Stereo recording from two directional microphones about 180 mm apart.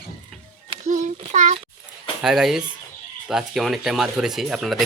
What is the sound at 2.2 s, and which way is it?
Speech, centre (ahead or behind).